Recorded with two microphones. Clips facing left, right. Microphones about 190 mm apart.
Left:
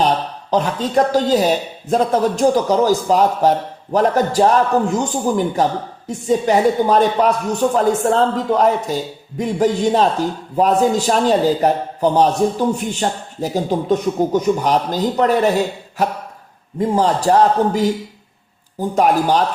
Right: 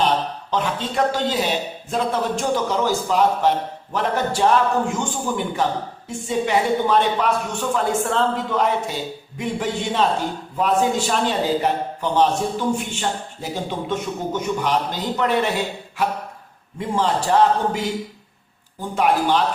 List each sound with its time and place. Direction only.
0.5 s a man's voice: 40° left (ahead or behind)